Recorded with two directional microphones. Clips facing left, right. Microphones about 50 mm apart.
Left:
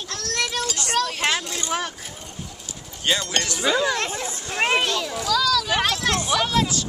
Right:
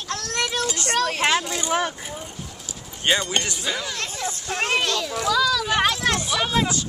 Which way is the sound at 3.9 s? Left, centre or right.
Left.